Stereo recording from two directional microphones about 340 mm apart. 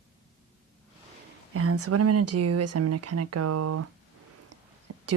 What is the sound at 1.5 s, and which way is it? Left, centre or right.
Speech, right.